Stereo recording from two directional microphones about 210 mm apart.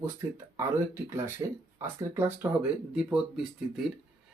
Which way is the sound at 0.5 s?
10° right (ahead or behind).